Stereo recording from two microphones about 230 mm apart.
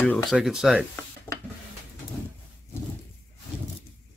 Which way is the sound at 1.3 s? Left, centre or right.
Centre.